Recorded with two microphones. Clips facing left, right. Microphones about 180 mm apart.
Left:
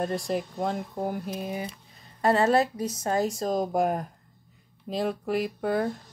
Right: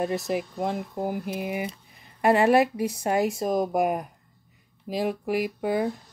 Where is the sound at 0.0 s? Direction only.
10° right (ahead or behind).